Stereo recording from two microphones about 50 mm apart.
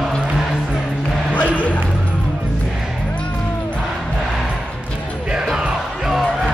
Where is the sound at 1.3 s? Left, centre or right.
Left.